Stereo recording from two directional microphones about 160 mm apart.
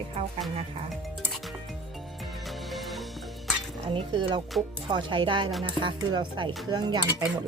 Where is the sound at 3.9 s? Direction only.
30° right (ahead or behind).